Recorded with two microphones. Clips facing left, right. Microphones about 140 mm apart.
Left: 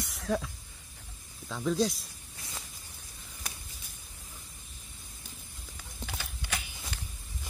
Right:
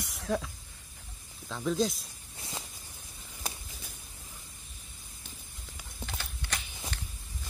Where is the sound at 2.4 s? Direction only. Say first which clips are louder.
Right 4 dB; 25° right (ahead or behind).